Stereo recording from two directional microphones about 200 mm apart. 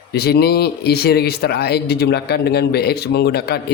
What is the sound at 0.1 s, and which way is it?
Speech, 55° left (ahead or behind).